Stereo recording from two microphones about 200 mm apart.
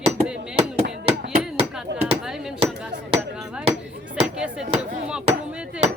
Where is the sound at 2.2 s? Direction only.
Centre (ahead or behind).